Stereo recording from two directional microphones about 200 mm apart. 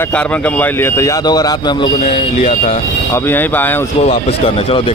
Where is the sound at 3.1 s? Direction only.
10° left (ahead or behind).